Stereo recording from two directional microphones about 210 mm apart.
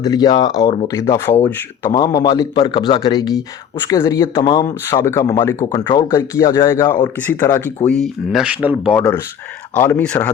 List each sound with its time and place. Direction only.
0.0 s speech: 20° left (ahead or behind); by 9.0 s centre (ahead or behind)
9.0 s speech: 10° left (ahead or behind)